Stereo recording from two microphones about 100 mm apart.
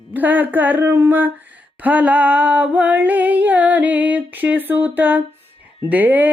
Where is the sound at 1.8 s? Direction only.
15° right (ahead or behind).